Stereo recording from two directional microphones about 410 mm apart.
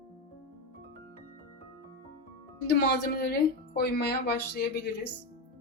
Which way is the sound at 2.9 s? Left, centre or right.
Left.